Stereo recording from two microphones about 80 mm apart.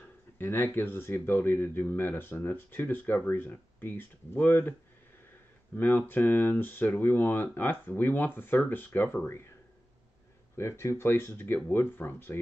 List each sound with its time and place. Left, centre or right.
0.4 s speech: left
5.8 s speech: left
10.5 s speech: left